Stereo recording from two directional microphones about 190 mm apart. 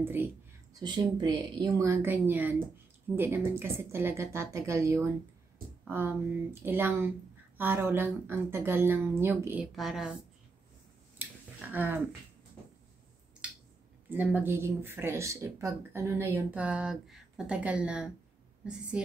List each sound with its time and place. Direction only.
0.0 s speech: 10° right (ahead or behind)
0.7 s a woman's voice: 20° right (ahead or behind); by 10.1 s centre (ahead or behind)
11.1 s a sound: 10° right (ahead or behind)
14.0 s a woman's voice: 10° right (ahead or behind)